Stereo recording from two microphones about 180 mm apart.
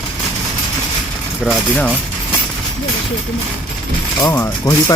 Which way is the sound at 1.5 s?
10° left (ahead or behind).